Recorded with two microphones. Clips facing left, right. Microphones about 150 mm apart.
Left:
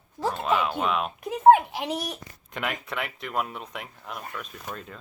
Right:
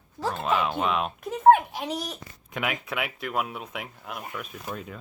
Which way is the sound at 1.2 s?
10° left (ahead or behind).